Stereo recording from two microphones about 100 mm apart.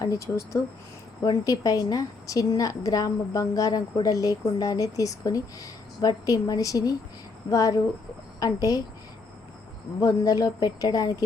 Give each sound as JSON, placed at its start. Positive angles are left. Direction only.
{"t": 0.0, "sound": "a woman's voice", "side_deg": 30}
{"t": 10.0, "sound": "a woman's voice", "side_deg": 35}